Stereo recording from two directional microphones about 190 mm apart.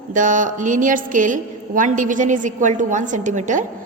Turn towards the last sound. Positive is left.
turn(degrees=-40)  # may be behind; listen again after turning